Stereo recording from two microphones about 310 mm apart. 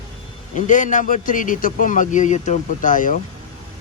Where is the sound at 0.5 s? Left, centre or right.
Left.